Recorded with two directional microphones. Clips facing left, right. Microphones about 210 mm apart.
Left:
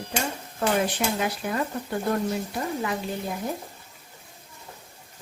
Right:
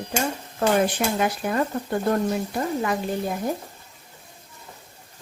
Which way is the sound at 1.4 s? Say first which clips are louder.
Right 3 dB; 50° right (ahead or behind).